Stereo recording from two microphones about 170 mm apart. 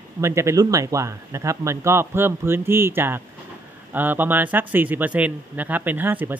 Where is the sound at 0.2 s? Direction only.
15° right (ahead or behind).